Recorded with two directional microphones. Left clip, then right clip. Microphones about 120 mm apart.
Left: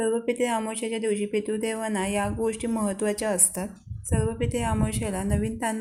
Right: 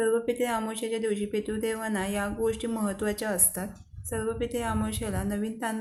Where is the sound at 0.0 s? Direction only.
15° left (ahead or behind).